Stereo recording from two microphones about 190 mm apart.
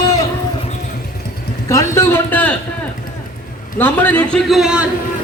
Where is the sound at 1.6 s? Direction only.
15° left (ahead or behind).